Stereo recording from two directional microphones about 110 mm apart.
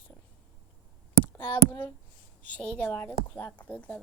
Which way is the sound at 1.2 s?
20° left (ahead or behind).